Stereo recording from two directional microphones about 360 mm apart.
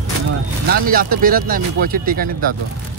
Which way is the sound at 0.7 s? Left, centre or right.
Right.